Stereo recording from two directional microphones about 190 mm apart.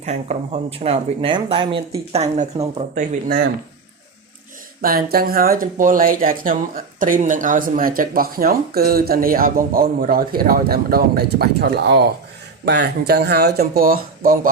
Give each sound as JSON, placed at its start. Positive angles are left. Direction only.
{"t": 0.0, "sound": "speech", "side_deg": -35}
{"t": 4.8, "sound": "speech", "side_deg": -50}